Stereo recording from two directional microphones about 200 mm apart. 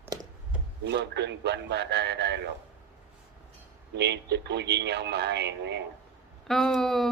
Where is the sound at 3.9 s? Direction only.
55° right (ahead or behind).